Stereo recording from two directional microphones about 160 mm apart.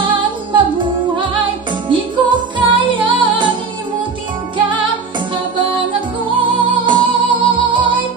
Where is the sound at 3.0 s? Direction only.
30° right (ahead or behind).